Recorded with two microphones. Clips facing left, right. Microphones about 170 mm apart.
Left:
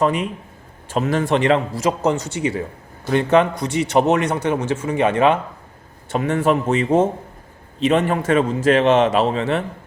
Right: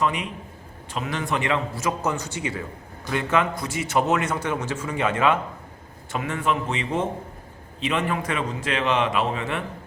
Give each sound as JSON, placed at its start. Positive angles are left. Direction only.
{"t": 0.0, "sound": "a man's voice", "side_deg": 45}
{"t": 1.9, "sound": "speech", "side_deg": 25}
{"t": 6.1, "sound": "a man's voice", "side_deg": 40}